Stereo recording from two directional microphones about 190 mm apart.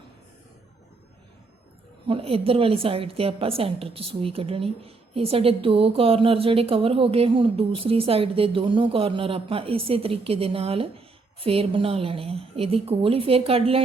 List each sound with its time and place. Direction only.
2.0 s a woman's voice: 30° right (ahead or behind)